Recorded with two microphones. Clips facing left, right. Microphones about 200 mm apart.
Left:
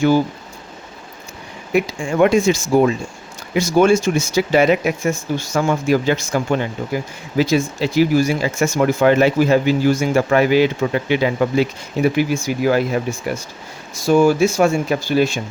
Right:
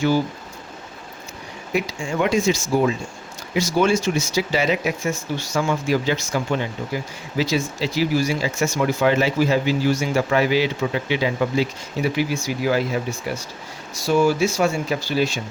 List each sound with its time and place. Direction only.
1.7 s speech: 55° left (ahead or behind)